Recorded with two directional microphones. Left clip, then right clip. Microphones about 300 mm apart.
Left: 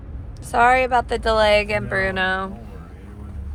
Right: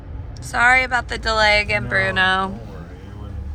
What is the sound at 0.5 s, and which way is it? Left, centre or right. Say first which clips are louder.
Speech: even; centre.